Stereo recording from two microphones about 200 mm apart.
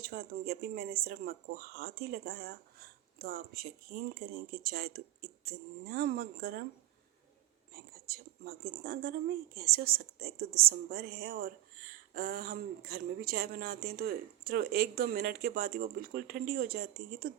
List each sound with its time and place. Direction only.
0.0 s speech: 50° right (ahead or behind)
7.7 s speech: 50° right (ahead or behind)